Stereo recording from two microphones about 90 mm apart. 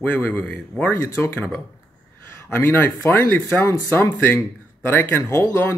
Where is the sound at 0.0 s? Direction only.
20° left (ahead or behind).